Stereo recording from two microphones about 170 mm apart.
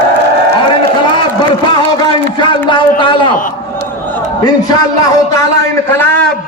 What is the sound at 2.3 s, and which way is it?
Speech, 30° left (ahead or behind).